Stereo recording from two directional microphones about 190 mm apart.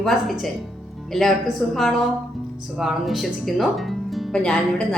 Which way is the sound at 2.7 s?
Centre (ahead or behind).